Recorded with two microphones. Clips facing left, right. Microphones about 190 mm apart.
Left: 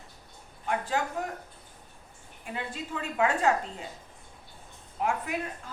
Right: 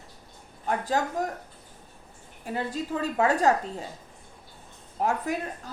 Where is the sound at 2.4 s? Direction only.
40° right (ahead or behind).